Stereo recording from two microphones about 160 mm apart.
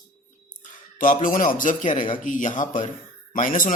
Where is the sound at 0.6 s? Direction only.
55° left (ahead or behind).